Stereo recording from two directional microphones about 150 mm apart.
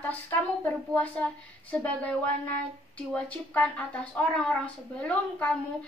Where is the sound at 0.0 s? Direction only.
10° left (ahead or behind).